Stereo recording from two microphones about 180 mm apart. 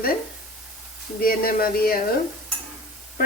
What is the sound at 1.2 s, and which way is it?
Speech, 55° left (ahead or behind).